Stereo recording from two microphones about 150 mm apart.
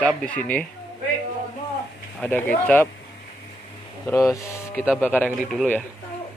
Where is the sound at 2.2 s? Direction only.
10° left (ahead or behind).